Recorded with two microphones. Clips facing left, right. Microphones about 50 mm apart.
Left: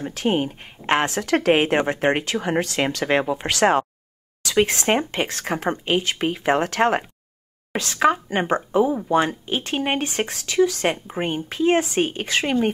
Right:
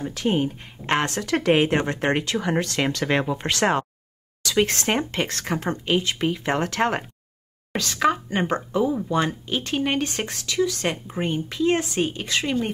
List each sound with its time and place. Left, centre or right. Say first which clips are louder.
0.1 s speech: left 1 dB; left
0.8 s speech: left 3 dB; left
1.2 s speech: left 2 dB; left
1.8 s speech: left 3 dB; centre; by 6.4 s left
6.4 s speech: left 6 dB; centre; by 12.7 s left